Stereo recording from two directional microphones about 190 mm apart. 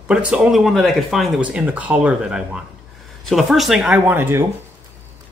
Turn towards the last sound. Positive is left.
turn(degrees=-10)  # may be behind; listen again after turning